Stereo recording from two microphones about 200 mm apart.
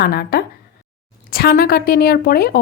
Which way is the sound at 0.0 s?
50° left (ahead or behind).